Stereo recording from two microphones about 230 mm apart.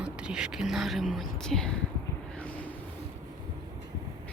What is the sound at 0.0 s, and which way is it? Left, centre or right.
Speech, centre.